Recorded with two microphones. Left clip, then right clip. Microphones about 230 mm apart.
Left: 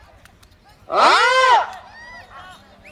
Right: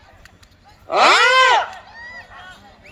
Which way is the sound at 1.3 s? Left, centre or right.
Right.